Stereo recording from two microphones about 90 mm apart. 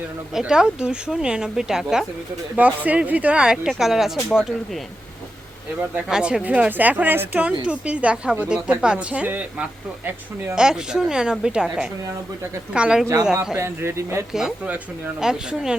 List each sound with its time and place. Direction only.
0.3 s speech: 10° right (ahead or behind)
2.6 s speech: 15° right (ahead or behind); by 4.8 s centre (ahead or behind)
6.1 s speech: 5° right (ahead or behind)
13.6 s speech: 30° right (ahead or behind)
14.3 s speech: 5° right (ahead or behind)